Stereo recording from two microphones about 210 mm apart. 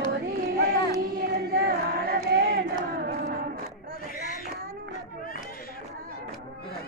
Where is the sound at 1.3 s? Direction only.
45° right (ahead or behind).